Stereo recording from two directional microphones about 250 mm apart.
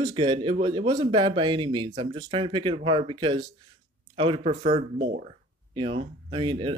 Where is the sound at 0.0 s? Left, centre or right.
Centre.